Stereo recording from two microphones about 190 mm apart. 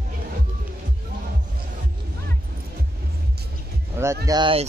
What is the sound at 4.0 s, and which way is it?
Speech, 10° right (ahead or behind).